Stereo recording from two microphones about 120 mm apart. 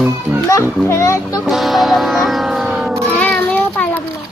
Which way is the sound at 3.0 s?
10° left (ahead or behind).